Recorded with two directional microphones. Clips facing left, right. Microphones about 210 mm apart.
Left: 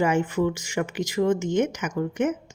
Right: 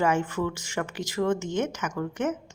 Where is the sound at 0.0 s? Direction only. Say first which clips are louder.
Left 3 dB; 15° left (ahead or behind).